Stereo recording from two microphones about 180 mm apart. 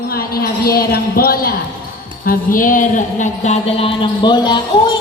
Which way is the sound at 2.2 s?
50° left (ahead or behind).